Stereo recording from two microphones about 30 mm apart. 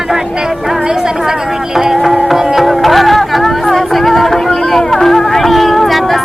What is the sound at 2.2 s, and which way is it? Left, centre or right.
Music, centre.